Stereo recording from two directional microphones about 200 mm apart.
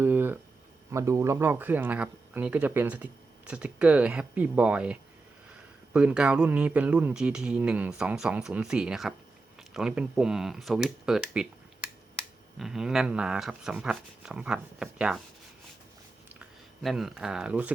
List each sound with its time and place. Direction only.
0.0 s a sound: 10° right (ahead or behind)
0.9 s speech: 15° right (ahead or behind)
12.5 s speech: centre (ahead or behind)
16.4 s speech: centre (ahead or behind)